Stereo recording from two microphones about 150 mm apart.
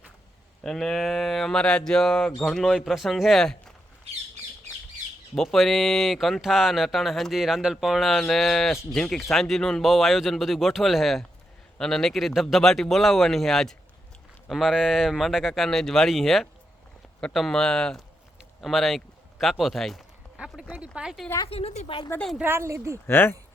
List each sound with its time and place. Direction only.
0.6 s speech: 5° left (ahead or behind)
5.3 s speech: 5° left (ahead or behind)
21.3 s a woman's voice: 35° left (ahead or behind)
22.1 s speech: 5° left (ahead or behind)
22.4 s speech: 15° right (ahead or behind)
23.0 s speech: 15° left (ahead or behind)